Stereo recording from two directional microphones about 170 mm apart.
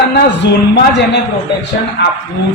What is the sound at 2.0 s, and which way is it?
Speech, 90° left.